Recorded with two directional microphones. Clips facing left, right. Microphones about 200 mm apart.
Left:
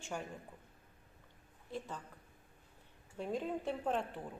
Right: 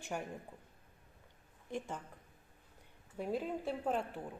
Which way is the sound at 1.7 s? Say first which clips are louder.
Right 2 dB; 15° right (ahead or behind).